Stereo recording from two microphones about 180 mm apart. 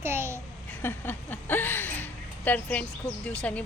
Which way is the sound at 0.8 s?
10° left (ahead or behind).